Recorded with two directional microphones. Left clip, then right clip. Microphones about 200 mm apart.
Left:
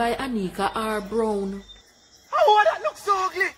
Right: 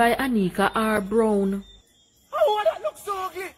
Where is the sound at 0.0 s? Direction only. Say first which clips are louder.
Right 4 dB; 30° right (ahead or behind).